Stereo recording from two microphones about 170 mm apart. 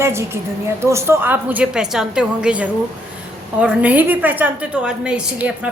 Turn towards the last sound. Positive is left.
turn(degrees=-5)  # may be behind; listen again after turning